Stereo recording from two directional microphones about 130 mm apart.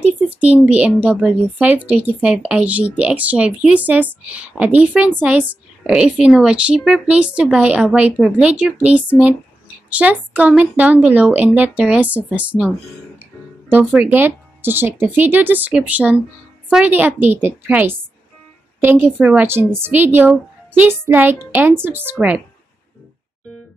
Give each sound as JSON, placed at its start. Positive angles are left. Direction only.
{"t": 0.0, "sound": "speech", "side_deg": -10}